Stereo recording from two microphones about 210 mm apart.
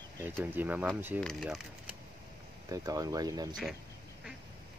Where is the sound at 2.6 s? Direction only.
15° right (ahead or behind).